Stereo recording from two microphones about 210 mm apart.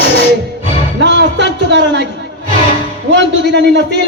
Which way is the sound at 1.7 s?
60° right (ahead or behind).